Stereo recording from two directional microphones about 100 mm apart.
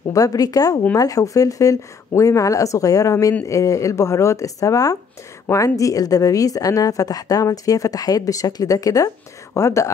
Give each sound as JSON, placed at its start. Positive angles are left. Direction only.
{"t": 0.1, "sound": "a woman's voice", "side_deg": 35}